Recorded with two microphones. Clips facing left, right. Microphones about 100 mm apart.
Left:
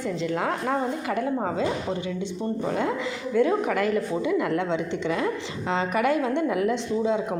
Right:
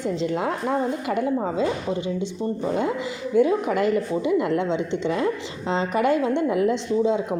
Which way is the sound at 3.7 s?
25° right (ahead or behind).